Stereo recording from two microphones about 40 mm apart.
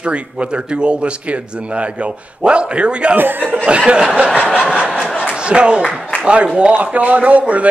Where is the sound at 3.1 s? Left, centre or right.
Right.